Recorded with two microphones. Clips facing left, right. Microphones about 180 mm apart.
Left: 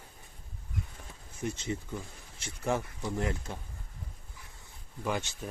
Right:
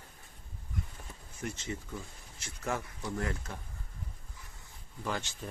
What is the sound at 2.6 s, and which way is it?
Speech, 20° left (ahead or behind).